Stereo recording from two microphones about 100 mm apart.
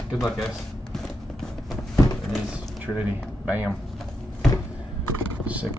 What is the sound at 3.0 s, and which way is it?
Speech, 15° right (ahead or behind).